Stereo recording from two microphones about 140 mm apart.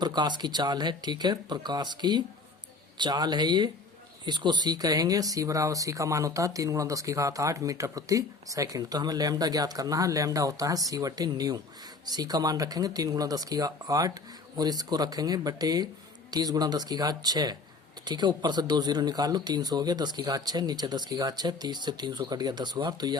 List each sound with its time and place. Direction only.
0.0 s speech: 30° right (ahead or behind)